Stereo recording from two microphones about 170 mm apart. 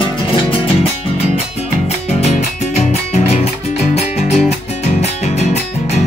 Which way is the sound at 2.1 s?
40° left (ahead or behind).